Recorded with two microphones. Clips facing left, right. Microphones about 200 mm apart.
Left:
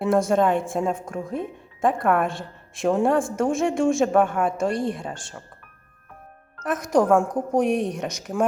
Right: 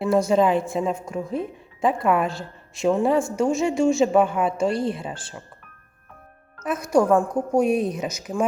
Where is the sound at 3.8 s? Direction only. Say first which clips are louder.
Right 2 dB; 50° left (ahead or behind).